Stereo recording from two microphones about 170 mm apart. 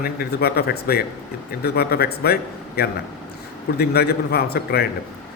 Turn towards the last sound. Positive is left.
turn(degrees=70)  # may be behind; listen again after turning